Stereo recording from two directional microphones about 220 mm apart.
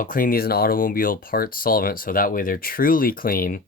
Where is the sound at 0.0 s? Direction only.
40° left (ahead or behind).